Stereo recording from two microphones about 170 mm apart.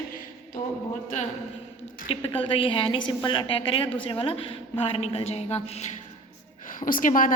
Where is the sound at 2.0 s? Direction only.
35° left (ahead or behind).